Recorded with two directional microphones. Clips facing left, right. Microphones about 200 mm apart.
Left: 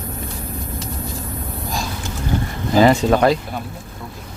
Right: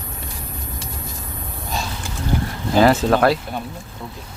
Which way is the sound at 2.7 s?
Centre (ahead or behind).